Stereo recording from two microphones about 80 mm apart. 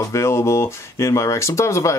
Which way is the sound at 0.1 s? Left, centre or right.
Left.